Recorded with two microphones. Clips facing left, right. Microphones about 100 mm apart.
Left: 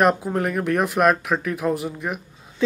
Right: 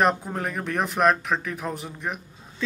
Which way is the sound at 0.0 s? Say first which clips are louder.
Left 4 dB; 5° left (ahead or behind).